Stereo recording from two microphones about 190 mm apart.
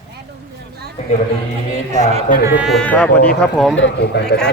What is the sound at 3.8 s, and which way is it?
Speech, 70° left (ahead or behind).